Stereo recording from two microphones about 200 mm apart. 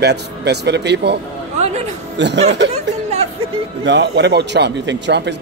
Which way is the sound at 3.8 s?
60° right (ahead or behind).